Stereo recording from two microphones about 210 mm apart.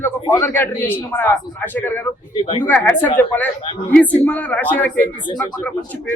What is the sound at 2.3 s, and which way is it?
Speech, 25° left (ahead or behind).